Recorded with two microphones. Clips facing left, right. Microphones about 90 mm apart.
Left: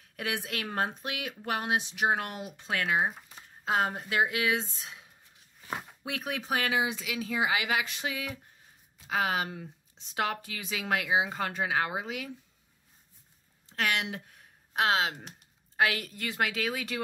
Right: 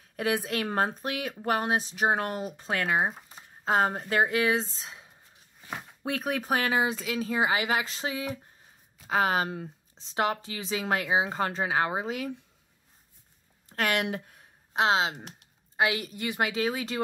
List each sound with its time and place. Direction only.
0.1 s a woman's voice: 35° right (ahead or behind)
13.7 s a sound: 45° right (ahead or behind); by 15.1 s 25° right (ahead or behind)
15.1 s speech: centre (ahead or behind)
15.7 s a woman's voice: 20° right (ahead or behind)